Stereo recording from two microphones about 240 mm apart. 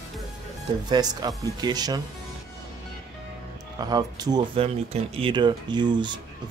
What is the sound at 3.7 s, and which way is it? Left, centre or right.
Speech, centre.